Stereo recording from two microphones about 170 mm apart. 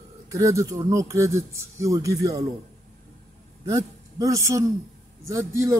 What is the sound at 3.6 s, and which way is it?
A woman's voice, 20° right (ahead or behind).